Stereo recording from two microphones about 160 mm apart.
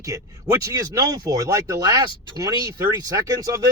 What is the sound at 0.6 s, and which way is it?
Speech, 25° right (ahead or behind).